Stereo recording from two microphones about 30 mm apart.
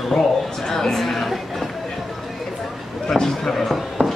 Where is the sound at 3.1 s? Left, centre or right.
Centre.